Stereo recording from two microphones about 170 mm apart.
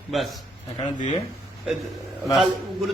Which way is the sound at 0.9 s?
45° left (ahead or behind).